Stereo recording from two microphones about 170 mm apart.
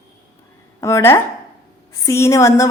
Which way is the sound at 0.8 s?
15° left (ahead or behind).